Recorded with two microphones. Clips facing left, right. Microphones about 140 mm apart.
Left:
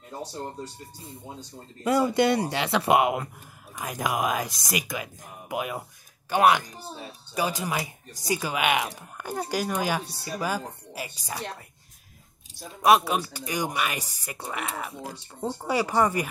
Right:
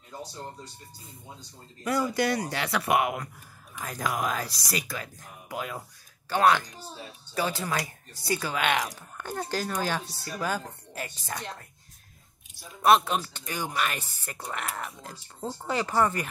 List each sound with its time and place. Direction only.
1.9 s speech: 25° left (ahead or behind)
12.8 s speech: 10° left (ahead or behind)